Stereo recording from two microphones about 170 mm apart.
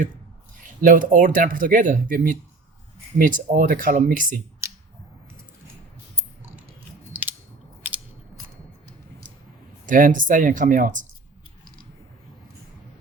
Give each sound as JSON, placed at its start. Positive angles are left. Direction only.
{"t": 0.8, "sound": "speech", "side_deg": -50}
{"t": 4.6, "sound": "a sound", "side_deg": -15}
{"t": 7.1, "sound": "chewing", "side_deg": -10}
{"t": 7.9, "sound": "biting", "side_deg": -10}
{"t": 9.8, "sound": "speech", "side_deg": -50}